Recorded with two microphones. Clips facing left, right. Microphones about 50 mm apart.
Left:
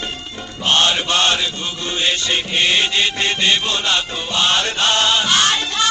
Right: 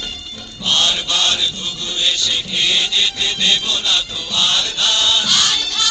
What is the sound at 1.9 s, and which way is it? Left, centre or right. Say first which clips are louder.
Music: left 1 dB; left.